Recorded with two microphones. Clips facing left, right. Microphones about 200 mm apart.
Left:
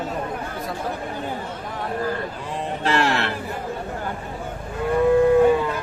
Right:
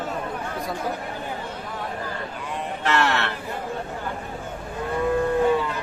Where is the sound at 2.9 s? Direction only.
30° left (ahead or behind).